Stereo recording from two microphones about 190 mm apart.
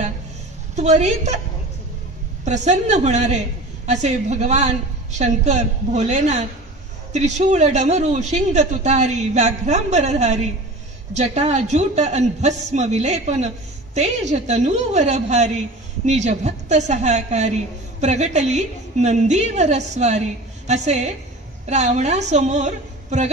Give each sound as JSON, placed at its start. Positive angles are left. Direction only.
{"t": 0.7, "sound": "a man's voice", "side_deg": -40}
{"t": 2.4, "sound": "a man's voice", "side_deg": -35}